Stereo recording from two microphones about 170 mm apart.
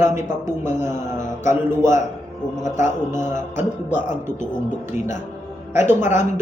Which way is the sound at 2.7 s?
45° left (ahead or behind).